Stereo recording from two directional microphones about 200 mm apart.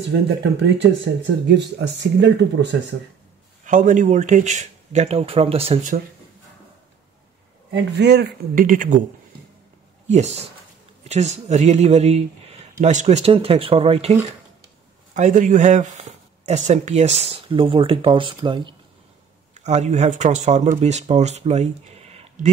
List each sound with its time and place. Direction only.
0.4 s speech: 60° right (ahead or behind)
3.6 s speech: 40° right (ahead or behind)
7.7 s speech: 60° right (ahead or behind)
8.6 s speech: 40° right (ahead or behind)
10.0 s speech: 35° right (ahead or behind)
15.1 s speech: 40° right (ahead or behind)
19.6 s speech: 35° right (ahead or behind)